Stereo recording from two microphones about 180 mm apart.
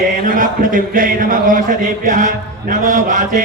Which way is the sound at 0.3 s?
50° right (ahead or behind).